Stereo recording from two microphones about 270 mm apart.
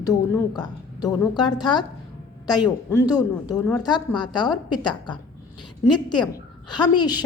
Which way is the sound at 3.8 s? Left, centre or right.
Centre.